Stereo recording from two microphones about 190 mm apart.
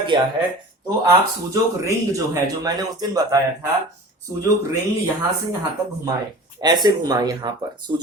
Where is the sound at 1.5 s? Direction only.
15° right (ahead or behind).